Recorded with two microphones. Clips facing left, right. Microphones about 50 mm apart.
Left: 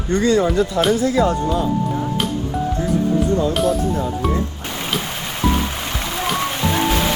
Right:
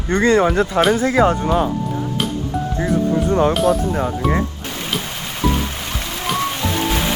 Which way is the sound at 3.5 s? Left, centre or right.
Centre.